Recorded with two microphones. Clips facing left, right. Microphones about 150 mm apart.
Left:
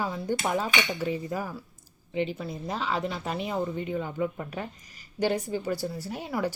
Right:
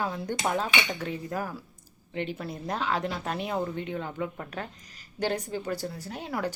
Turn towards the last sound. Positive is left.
turn(degrees=5)  # may be behind; listen again after turning